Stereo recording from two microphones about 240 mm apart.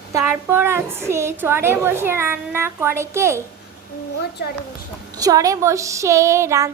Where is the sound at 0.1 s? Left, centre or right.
Centre.